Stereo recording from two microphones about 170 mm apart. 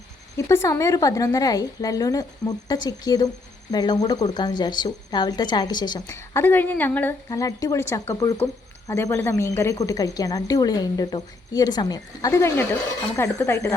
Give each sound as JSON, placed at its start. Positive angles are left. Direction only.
{"t": 0.3, "sound": "a woman's voice", "side_deg": 20}